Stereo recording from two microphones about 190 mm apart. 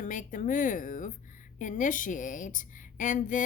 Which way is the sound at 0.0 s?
40° left (ahead or behind).